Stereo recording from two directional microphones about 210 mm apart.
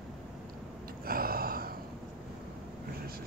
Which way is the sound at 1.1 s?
45° right (ahead or behind).